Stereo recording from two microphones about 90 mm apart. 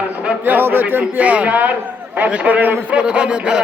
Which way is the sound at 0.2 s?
15° right (ahead or behind).